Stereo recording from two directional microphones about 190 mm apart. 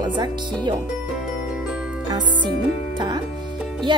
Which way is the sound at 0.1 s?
25° right (ahead or behind).